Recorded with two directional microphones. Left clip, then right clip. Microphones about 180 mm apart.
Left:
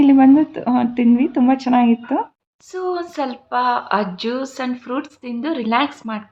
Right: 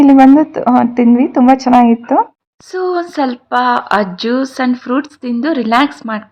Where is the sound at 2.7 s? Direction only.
45° right (ahead or behind).